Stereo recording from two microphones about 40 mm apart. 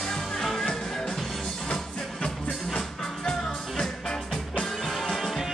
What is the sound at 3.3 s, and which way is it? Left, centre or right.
Music, centre.